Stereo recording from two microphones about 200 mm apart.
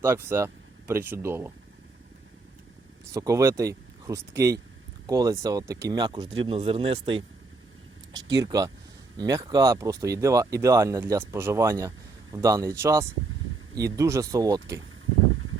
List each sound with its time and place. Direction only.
0.0 s speech: 10° right (ahead or behind)
3.1 s speech: 15° right (ahead or behind)
8.4 s speech: 20° right (ahead or behind)